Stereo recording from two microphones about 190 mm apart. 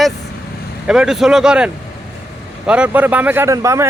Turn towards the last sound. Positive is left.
turn(degrees=-15)  # may be behind; listen again after turning